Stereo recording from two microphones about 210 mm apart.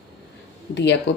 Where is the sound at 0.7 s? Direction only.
55° left (ahead or behind).